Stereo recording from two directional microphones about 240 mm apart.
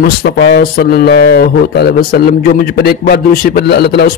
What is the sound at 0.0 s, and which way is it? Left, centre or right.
A man's voice, left.